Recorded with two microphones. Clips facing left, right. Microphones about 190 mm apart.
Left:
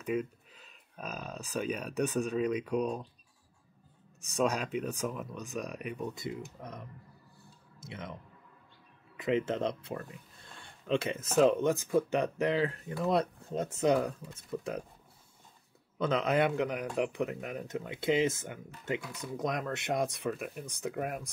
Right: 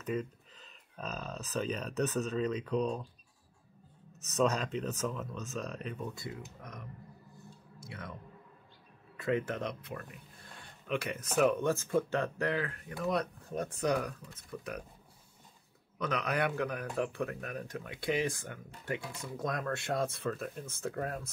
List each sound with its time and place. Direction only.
0.0 s speech: 10° left (ahead or behind)
4.2 s speech: 10° left (ahead or behind); by 6.7 s 25° left (ahead or behind)
7.8 s speech: 20° left (ahead or behind)
16.0 s speech: 25° left (ahead or behind)